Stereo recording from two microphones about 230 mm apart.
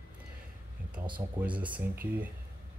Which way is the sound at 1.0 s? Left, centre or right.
Centre.